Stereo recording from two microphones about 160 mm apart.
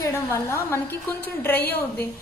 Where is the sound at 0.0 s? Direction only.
15° left (ahead or behind).